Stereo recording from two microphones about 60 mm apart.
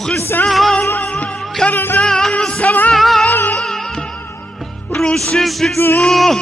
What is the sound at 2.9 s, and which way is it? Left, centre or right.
Music, centre.